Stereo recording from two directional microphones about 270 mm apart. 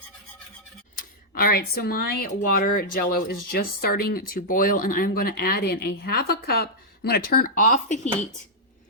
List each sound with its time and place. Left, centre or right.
0.9 s speech: left